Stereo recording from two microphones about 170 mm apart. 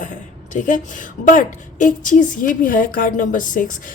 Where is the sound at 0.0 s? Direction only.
50° left (ahead or behind).